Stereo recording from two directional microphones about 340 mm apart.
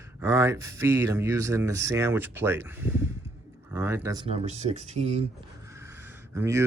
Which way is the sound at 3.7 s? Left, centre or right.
Centre.